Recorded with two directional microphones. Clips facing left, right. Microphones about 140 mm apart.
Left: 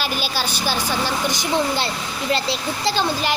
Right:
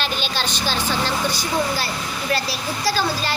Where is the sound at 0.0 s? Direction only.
10° left (ahead or behind).